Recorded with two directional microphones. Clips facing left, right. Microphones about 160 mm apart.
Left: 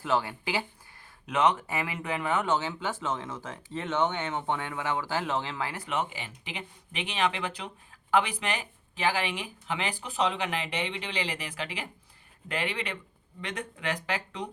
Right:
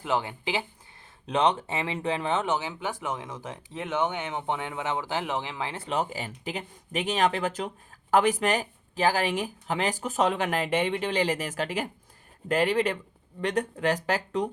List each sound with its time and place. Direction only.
0.0 s speech: 20° right (ahead or behind)
2.5 s speech: 15° right (ahead or behind); by 14.5 s 40° right (ahead or behind)